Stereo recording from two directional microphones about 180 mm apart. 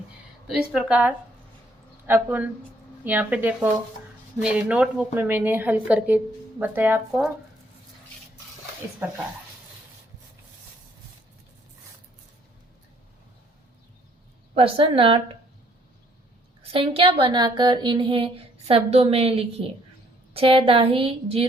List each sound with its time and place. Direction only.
0.4 s a woman's voice: 5° right (ahead or behind)
9.0 s a woman's voice: 10° right (ahead or behind)
14.5 s a woman's voice: 30° right (ahead or behind)
16.7 s a woman's voice: 30° right (ahead or behind)